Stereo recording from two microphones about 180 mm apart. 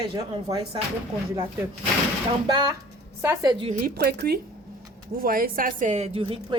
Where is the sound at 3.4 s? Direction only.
25° right (ahead or behind).